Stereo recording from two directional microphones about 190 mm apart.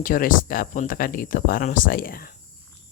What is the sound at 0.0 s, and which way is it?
Speech, 45° left (ahead or behind).